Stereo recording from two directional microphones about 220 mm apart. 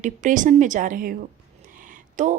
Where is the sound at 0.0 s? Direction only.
35° right (ahead or behind).